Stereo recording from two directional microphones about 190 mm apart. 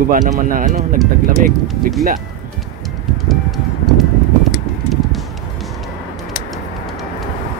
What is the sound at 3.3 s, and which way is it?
Music, centre (ahead or behind).